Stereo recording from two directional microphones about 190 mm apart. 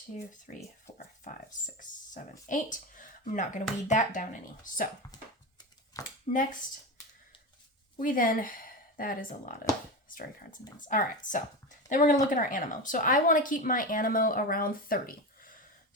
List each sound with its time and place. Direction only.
0.5 s speech: 40° left (ahead or behind)
0.9 s a sound: 40° left (ahead or behind)
2.5 s speech: 45° left (ahead or behind)
6.0 s speech: 20° left (ahead or behind)
7.9 s speech: 45° left (ahead or behind)
10.8 s speech: 45° left (ahead or behind)